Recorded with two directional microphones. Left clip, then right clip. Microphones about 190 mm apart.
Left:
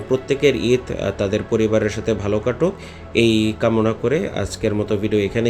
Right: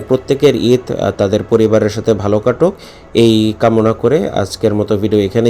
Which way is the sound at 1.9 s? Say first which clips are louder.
Right 8 dB; centre (ahead or behind).